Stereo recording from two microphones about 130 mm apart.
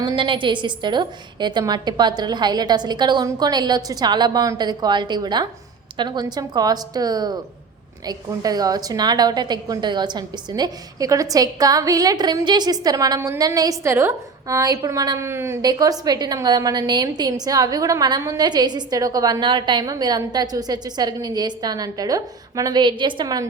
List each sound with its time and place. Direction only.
0.0 s a woman's voice: 35° right (ahead or behind); by 15.5 s 20° right (ahead or behind)
15.6 s a woman's voice: 30° right (ahead or behind)